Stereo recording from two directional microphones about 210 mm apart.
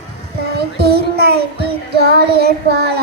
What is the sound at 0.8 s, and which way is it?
A child's voice, 50° right (ahead or behind).